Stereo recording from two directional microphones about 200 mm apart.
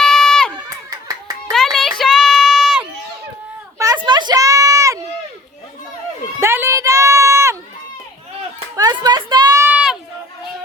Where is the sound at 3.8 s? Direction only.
15° right (ahead or behind).